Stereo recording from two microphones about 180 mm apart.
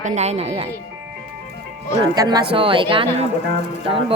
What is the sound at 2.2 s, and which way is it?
Speech, 25° right (ahead or behind).